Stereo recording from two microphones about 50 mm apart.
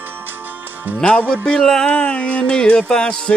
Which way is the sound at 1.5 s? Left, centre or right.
Centre.